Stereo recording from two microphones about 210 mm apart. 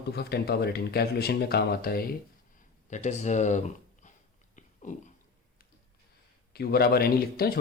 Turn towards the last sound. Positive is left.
turn(degrees=45)  # may be behind; listen again after turning